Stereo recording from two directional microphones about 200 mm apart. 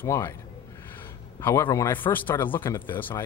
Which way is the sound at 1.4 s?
15° left (ahead or behind).